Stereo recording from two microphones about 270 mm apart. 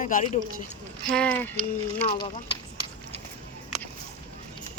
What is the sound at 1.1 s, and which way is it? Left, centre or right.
Speech, centre.